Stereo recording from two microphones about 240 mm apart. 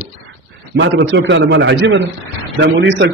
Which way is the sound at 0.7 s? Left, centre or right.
Right.